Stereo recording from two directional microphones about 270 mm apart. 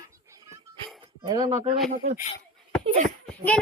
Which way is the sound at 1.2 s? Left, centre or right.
Centre.